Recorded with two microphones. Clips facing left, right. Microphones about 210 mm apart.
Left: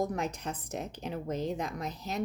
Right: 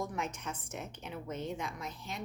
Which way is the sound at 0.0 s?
35° left (ahead or behind).